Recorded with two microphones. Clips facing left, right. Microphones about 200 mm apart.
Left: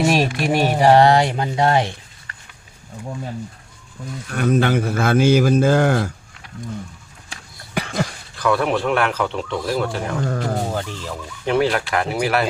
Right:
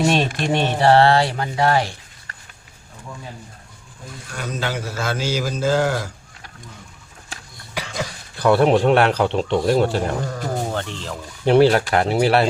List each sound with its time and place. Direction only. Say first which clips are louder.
0.0 s speech: left 1 dB; 5° left (ahead or behind)
4.3 s a man's voice: left 9 dB; 55° left (ahead or behind)
7.7 s a sound: left 4 dB; 55° left (ahead or behind)
8.4 s speech: right 4 dB; 30° right (ahead or behind)
10.8 s speech: left 1 dB; 5° left (ahead or behind)
11.4 s speech: right 5 dB; 35° right (ahead or behind)